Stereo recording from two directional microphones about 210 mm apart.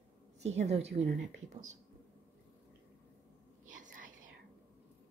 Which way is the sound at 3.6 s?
40° right (ahead or behind).